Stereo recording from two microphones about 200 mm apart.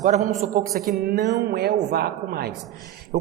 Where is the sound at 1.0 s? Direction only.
50° right (ahead or behind).